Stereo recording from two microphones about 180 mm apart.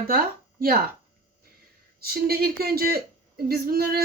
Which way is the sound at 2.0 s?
60° right (ahead or behind).